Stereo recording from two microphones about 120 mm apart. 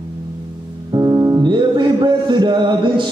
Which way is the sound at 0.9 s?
30° right (ahead or behind).